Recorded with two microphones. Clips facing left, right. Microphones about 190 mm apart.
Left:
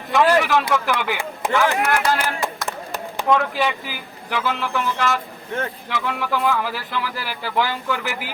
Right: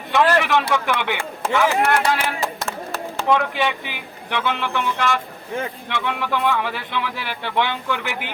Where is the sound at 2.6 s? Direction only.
15° left (ahead or behind).